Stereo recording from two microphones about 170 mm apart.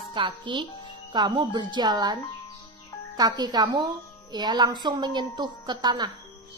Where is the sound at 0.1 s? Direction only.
30° right (ahead or behind).